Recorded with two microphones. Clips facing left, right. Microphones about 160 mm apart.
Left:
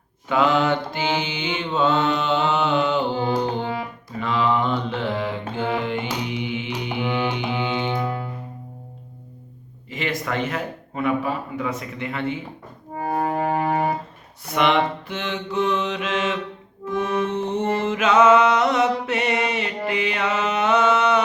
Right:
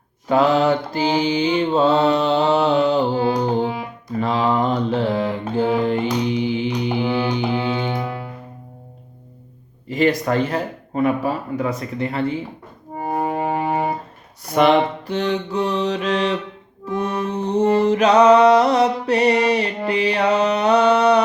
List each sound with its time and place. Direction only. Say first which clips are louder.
0.3 s mantra: right 4 dB; 35° right (ahead or behind)
3.6 s music: right 4 dB; 10° right (ahead or behind)
4.2 s mantra: right 3 dB; 35° right (ahead or behind)
6.2 s music: right 7 dB; 35° right (ahead or behind)
7.9 s music: even; 10° right (ahead or behind)
9.9 s mantra: right 8 dB; 40° right (ahead or behind)
13.0 s music: right 1 dB; 20° right (ahead or behind)
14.4 s mantra: right 5 dB; 35° right (ahead or behind)
16.9 s accordion: right 1 dB; centre (ahead or behind)
17.3 s mantra: right 5 dB; 35° right (ahead or behind)